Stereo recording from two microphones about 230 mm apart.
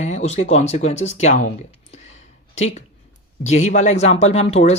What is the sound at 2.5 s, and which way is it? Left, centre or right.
Speech, left.